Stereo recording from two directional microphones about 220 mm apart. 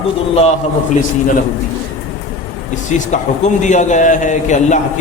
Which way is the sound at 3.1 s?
35° left (ahead or behind).